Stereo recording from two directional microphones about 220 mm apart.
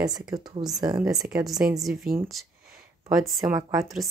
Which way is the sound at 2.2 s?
Centre (ahead or behind).